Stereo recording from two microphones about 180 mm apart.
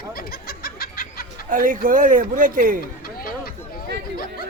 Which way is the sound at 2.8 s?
55° left (ahead or behind).